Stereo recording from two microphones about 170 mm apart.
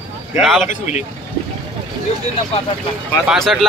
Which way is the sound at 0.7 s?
45° left (ahead or behind).